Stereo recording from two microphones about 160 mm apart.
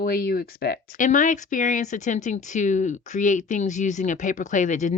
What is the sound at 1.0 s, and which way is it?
Speech, 55° left (ahead or behind).